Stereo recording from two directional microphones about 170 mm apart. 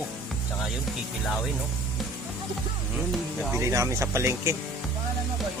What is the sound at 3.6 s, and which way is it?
Speech, 15° right (ahead or behind).